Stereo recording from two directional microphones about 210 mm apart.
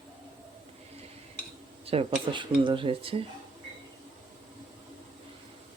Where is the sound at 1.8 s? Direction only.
25° right (ahead or behind).